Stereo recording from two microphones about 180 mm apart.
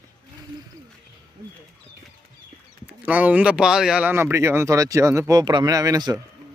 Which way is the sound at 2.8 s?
10° right (ahead or behind).